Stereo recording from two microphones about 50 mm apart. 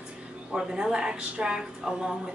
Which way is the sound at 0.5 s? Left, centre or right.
Centre.